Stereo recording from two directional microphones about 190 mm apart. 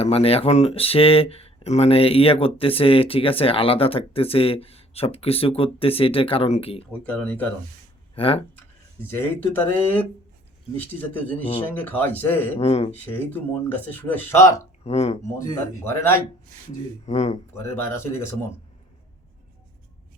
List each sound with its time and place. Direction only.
0.0 s speech: 30° left (ahead or behind)
7.0 s speech: 5° left (ahead or behind)
8.1 s speech: 30° left (ahead or behind)
9.0 s speech: 10° left (ahead or behind)
12.5 s speech: 35° left (ahead or behind)
12.9 s speech: 10° left (ahead or behind)
14.8 s speech: 35° left (ahead or behind)
15.4 s speech: 15° left (ahead or behind)
17.1 s speech: 35° left (ahead or behind)
17.5 s speech: 10° left (ahead or behind)